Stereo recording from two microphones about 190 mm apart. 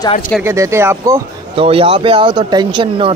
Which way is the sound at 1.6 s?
30° right (ahead or behind).